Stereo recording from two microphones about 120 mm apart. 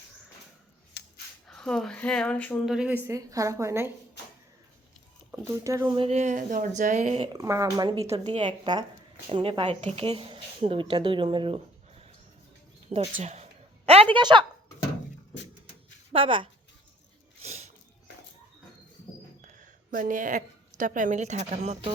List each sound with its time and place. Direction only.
1.5 s speech: 5° left (ahead or behind)
2.6 s speech: 10° right (ahead or behind)
3.1 s speech: 30° right (ahead or behind)
5.5 s speech: 25° right (ahead or behind)
6.0 s speech: 65° right (ahead or behind); by 7.2 s 90° right
7.3 s speech: 25° right (ahead or behind)
8.3 s a woman's voice: 45° right (ahead or behind)
12.9 s a sound: 60° right (ahead or behind)
14.2 s a woman's voice: 40° right (ahead or behind)
16.1 s speech: 45° right (ahead or behind)
17.4 s a sound: 65° right (ahead or behind)
19.4 s a woman's voice: 90° right; by 21.8 s 65° right (ahead or behind)